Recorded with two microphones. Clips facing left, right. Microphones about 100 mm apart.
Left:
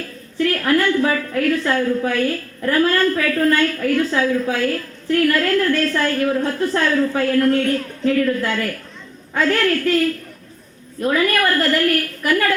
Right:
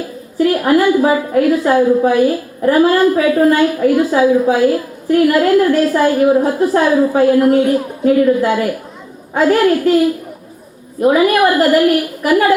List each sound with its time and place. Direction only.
0.0 s a woman's voice: 15° right (ahead or behind)